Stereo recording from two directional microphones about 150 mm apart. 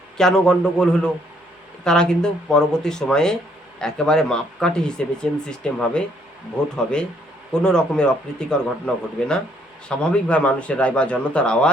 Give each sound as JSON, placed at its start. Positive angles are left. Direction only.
{"t": 0.2, "sound": "speech", "side_deg": 5}